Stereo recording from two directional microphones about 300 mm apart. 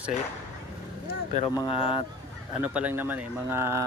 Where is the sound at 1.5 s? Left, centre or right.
Centre.